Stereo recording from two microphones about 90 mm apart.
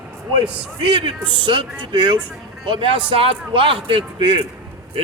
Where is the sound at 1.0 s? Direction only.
65° right (ahead or behind).